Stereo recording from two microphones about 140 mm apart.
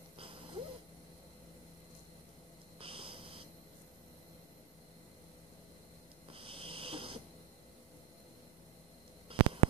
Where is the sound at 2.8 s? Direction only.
40° right (ahead or behind).